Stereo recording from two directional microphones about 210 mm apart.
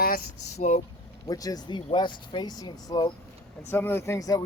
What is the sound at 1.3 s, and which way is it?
Speech, 15° left (ahead or behind).